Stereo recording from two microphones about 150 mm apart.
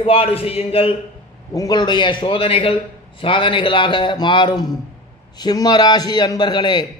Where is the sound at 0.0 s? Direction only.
40° left (ahead or behind).